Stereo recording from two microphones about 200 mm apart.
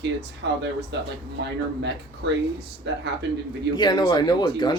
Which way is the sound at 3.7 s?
20° left (ahead or behind).